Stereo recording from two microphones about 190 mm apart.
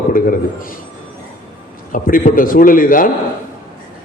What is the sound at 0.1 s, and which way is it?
Speech, 45° left (ahead or behind).